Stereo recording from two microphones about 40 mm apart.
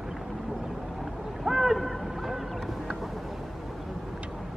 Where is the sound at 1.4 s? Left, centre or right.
Centre.